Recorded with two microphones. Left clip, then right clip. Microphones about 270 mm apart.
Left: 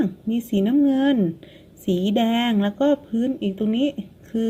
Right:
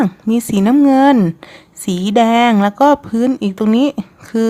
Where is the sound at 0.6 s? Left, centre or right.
Right.